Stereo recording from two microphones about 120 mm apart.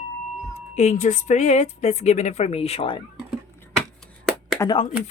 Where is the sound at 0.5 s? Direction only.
70° left (ahead or behind); by 3.0 s 50° left (ahead or behind).